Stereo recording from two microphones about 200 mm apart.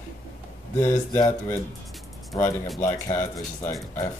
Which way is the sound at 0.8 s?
15° left (ahead or behind).